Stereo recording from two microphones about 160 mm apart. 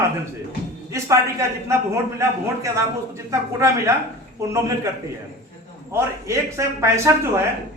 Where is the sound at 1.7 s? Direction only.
15° right (ahead or behind).